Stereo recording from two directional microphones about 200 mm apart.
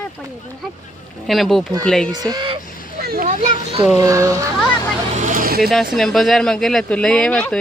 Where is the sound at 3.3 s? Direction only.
30° right (ahead or behind).